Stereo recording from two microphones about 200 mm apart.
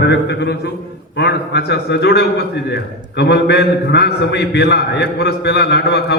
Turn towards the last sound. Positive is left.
turn(degrees=55)  # may be behind; listen again after turning